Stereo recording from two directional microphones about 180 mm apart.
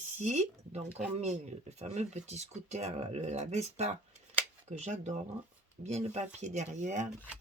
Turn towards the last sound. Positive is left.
turn(degrees=-40)  # may be behind; listen again after turning